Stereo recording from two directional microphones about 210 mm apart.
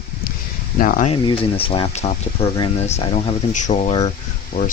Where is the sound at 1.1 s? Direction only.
25° left (ahead or behind).